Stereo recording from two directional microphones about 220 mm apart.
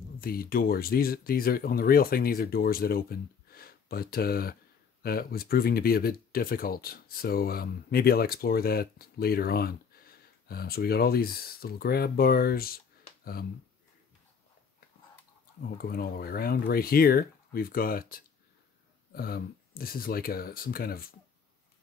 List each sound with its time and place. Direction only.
0.2 s speech: 40° left (ahead or behind)
15.6 s speech: 45° left (ahead or behind)